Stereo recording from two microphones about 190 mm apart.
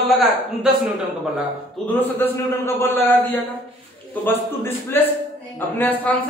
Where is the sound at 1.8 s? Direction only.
10° left (ahead or behind).